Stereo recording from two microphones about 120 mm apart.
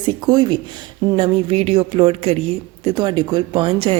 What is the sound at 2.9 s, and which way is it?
A woman's voice, 40° right (ahead or behind).